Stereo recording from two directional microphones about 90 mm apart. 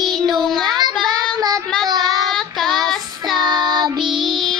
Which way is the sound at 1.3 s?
45° right (ahead or behind).